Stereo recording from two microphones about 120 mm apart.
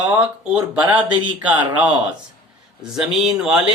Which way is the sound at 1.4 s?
10° right (ahead or behind).